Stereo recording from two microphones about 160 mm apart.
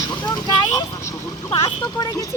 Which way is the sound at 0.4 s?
25° left (ahead or behind).